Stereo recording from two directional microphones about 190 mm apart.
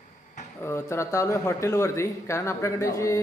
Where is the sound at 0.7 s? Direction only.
15° left (ahead or behind).